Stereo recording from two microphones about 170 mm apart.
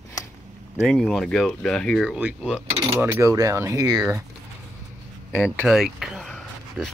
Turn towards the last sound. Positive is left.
turn(degrees=5)  # may be behind; listen again after turning